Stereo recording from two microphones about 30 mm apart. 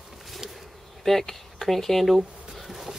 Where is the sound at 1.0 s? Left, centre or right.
Centre.